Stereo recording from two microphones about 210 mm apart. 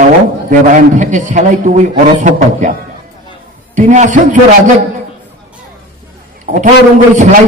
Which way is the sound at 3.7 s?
35° right (ahead or behind).